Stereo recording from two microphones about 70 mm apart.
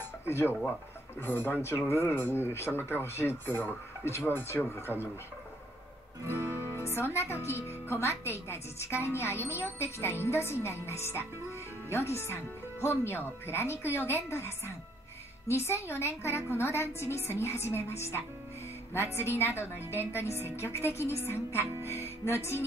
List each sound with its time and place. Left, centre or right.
0.3 s speech: left
6.2 s music: right
6.5 s speech: left